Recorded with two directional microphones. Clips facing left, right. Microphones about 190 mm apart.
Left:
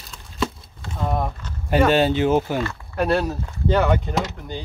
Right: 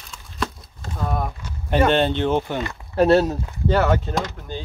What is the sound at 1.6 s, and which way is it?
Speech, 5° left (ahead or behind).